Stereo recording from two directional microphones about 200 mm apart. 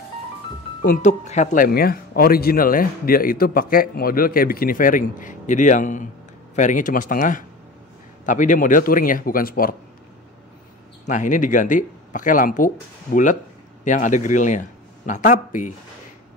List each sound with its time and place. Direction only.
0.8 s speech: 35° left (ahead or behind)
11.1 s a man's voice: 40° left (ahead or behind)